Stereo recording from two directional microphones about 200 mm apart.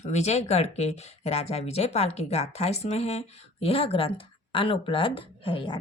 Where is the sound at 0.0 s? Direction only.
35° left (ahead or behind).